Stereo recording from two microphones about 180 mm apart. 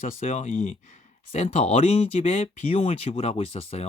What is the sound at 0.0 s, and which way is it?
Speech, 40° left (ahead or behind).